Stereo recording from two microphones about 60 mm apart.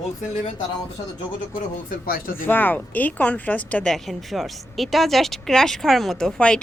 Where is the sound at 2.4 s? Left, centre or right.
Left.